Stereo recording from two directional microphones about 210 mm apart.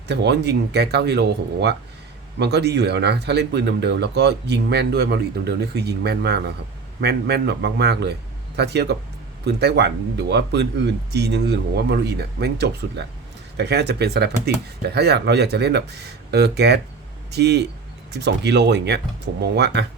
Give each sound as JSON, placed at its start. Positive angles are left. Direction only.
{"t": 0.1, "sound": "speech", "side_deg": -55}
{"t": 2.4, "sound": "speech", "side_deg": -50}